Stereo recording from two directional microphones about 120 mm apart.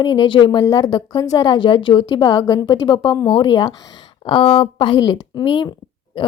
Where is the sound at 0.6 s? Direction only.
30° left (ahead or behind).